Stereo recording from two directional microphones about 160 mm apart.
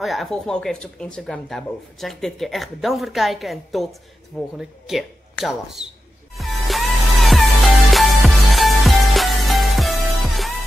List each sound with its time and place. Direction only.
0.0 s speech: centre (ahead or behind)
6.3 s music: centre (ahead or behind)